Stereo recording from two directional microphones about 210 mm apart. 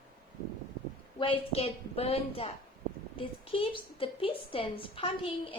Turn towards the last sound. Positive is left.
turn(degrees=25)  # may be behind; listen again after turning